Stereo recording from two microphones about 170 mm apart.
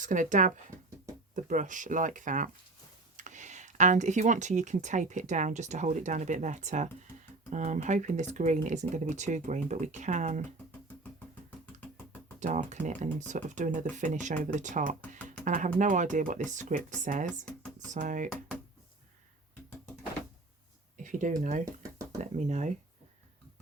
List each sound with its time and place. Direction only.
0.0 s speech: 50° right (ahead or behind)
12.4 s speech: 45° right (ahead or behind)
21.0 s speech: 50° right (ahead or behind)